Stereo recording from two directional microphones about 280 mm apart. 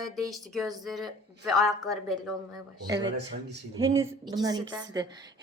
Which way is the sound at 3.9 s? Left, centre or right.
Centre.